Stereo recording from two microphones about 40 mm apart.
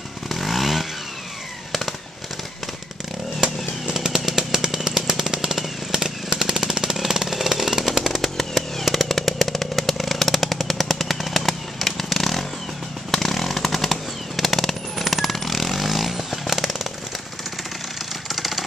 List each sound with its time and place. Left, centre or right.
0.3 s chainsaw: centre
3.9 s chainsaw: centre
4.6 s a sound: centre
8.4 s chainsaw: centre
18.3 s vehicle: centre